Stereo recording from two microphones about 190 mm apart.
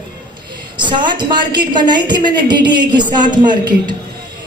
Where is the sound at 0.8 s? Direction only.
25° right (ahead or behind).